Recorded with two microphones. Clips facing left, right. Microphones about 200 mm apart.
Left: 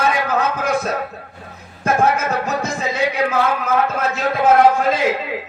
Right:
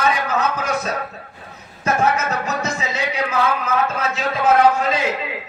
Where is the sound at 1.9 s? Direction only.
55° left (ahead or behind).